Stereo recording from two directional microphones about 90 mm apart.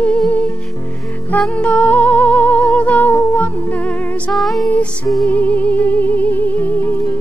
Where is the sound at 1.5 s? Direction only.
15° left (ahead or behind).